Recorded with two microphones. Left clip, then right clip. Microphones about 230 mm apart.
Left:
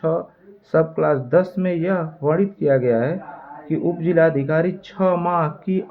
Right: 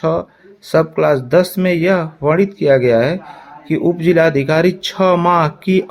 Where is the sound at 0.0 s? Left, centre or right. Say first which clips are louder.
Right 4 dB; right.